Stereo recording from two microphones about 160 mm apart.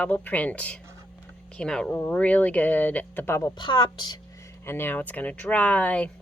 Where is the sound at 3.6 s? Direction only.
30° left (ahead or behind).